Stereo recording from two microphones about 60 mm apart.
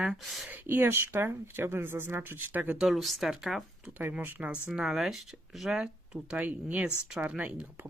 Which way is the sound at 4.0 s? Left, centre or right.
Right.